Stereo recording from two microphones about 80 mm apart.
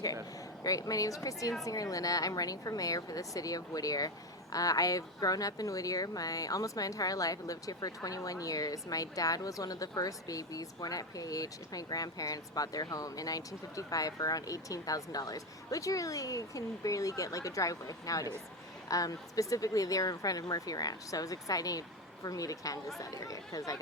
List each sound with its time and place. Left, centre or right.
0.6 s speech: left